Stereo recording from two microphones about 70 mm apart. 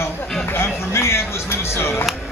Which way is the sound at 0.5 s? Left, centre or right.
Left.